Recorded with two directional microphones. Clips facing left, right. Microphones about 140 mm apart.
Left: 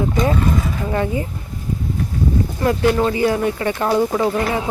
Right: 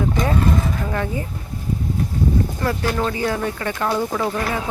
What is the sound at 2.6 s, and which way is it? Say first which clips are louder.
Speech: left 9 dB; 15° left (ahead or behind).